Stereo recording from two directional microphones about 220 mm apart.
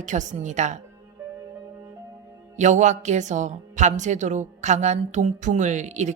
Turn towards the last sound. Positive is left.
turn(degrees=-30)  # may be behind; listen again after turning